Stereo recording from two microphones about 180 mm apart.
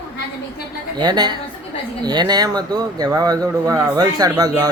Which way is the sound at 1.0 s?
25° right (ahead or behind).